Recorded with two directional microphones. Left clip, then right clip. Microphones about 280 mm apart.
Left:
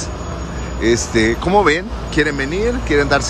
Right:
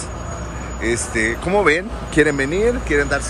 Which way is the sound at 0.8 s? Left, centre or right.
Centre.